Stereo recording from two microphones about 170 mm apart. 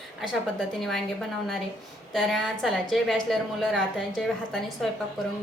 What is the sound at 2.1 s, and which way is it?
A woman's voice, centre (ahead or behind).